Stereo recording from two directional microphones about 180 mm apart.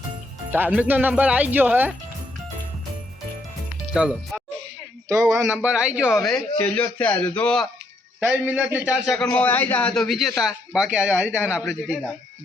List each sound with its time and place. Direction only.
0.5 s speech: 10° right (ahead or behind)
3.9 s speech: 5° right (ahead or behind)
5.0 s speech: 15° right (ahead or behind)
5.3 s speech: 5° right (ahead or behind)
8.2 s speech: 5° right (ahead or behind)